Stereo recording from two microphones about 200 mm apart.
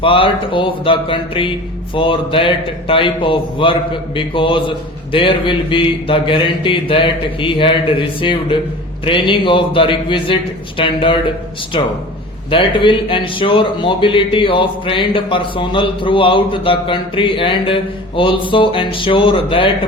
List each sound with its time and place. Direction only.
0.0 s a man's voice: 25° left (ahead or behind)